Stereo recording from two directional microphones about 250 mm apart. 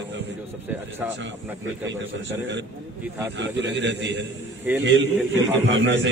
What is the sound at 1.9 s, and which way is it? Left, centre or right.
A man's voice, right.